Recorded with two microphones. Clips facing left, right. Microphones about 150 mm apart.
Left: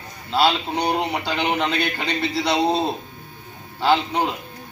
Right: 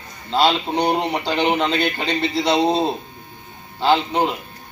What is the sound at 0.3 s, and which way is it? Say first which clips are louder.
Speech: right 2 dB; 25° right (ahead or behind).